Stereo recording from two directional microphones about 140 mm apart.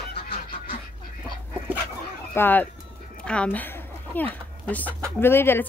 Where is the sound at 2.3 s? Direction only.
15° left (ahead or behind).